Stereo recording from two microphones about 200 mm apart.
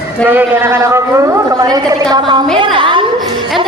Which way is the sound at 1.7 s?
20° right (ahead or behind).